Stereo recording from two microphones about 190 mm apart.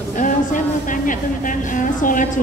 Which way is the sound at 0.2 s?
45° left (ahead or behind).